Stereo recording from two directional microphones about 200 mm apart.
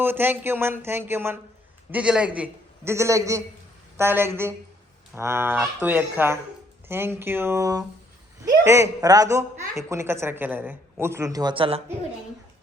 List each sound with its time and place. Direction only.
0.0 s a woman's voice: 10° right (ahead or behind); by 11.8 s 25° right (ahead or behind)